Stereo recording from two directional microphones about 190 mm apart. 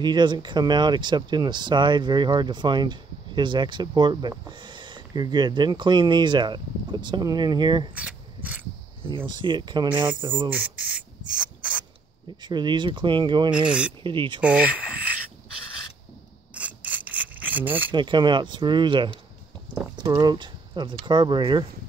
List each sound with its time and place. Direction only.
0.0 s speech: 25° right (ahead or behind)
7.9 s speech: 5° right (ahead or behind)
9.1 s speech: 25° right (ahead or behind)
10.5 s beatboxing: 5° right (ahead or behind)
12.4 s speech: 25° right (ahead or behind)
13.5 s rub: 5° right (ahead or behind)
14.0 s speech: 25° right (ahead or behind)
14.4 s speech: 5° right (ahead or behind)
16.5 s rub: 5° right (ahead or behind)
17.9 s speech: 25° right (ahead or behind)